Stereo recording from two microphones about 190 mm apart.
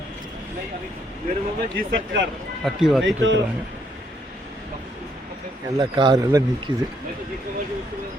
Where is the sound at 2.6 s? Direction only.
Centre (ahead or behind).